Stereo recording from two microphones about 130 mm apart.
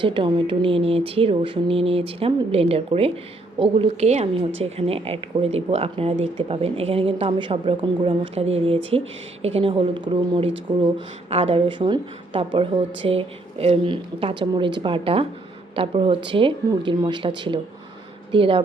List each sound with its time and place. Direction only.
0.0 s a woman's voice: 40° right (ahead or behind)